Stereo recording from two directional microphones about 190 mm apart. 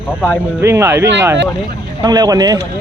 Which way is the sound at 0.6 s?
15° right (ahead or behind).